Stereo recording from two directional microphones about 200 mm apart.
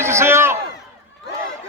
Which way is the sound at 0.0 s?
15° right (ahead or behind).